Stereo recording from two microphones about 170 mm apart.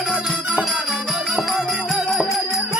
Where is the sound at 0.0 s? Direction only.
5° right (ahead or behind).